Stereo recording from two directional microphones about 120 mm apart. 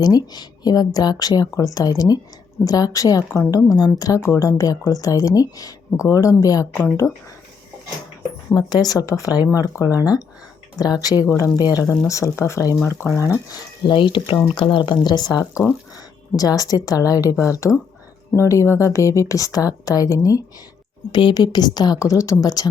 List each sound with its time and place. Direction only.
0.0 s a woman's voice: 35° left (ahead or behind)
6.7 s a woman's voice: 20° left (ahead or behind)
8.5 s a woman's voice: 35° left (ahead or behind)
13.5 s a woman's voice: 40° left (ahead or behind)
21.1 s a woman's voice: 40° left (ahead or behind)